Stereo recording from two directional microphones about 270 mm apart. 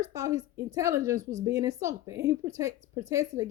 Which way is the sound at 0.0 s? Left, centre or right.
Centre.